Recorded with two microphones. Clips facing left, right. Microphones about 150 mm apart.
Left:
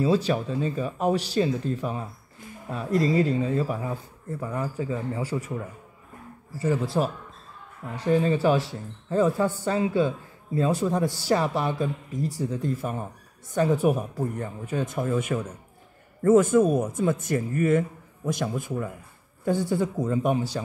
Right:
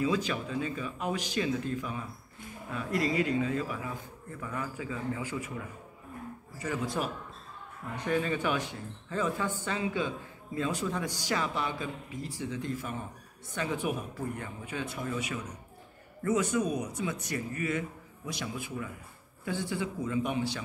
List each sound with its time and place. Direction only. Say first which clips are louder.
0.0 s a man's voice: left 7 dB; 35° left (ahead or behind)